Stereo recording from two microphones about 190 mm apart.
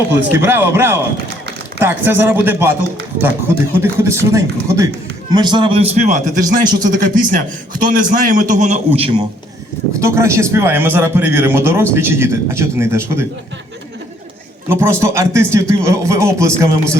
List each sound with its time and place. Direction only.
0.1 s a man's voice: 10° right (ahead or behind)
3.8 s a man's voice: 15° right (ahead or behind); by 6.2 s 35° right (ahead or behind)
6.4 s speech: 20° right (ahead or behind)
7.0 s a man's voice: 45° right (ahead or behind)
9.9 s a man's voice: 15° right (ahead or behind)
14.7 s a man's voice: 15° right (ahead or behind)